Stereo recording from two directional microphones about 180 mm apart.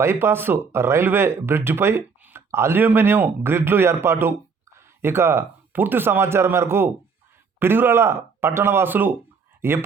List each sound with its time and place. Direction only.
0.0 s speech: 15° right (ahead or behind)